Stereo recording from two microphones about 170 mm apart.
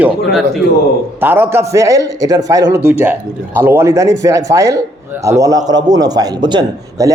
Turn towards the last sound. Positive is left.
turn(degrees=-25)  # may be behind; listen again after turning